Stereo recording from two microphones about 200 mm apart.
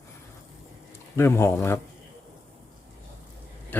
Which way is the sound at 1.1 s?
10° left (ahead or behind).